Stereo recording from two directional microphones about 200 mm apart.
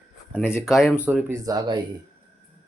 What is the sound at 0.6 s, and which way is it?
Speech, centre (ahead or behind).